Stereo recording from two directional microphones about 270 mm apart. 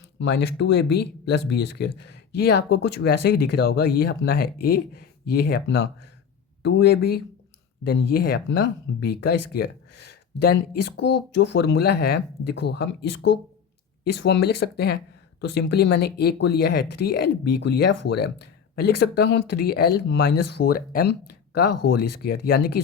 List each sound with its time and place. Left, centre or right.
0.2 s speech: left
14.3 s speech: left
20.4 s speech: left
20.7 s speech: left
21.7 s speech: left
22.2 s speech: left